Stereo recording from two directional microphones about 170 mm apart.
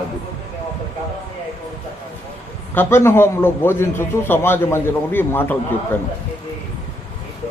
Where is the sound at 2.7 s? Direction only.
15° left (ahead or behind).